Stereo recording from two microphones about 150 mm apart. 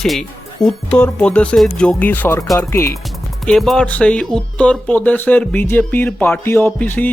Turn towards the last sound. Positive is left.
turn(degrees=10)  # may be behind; listen again after turning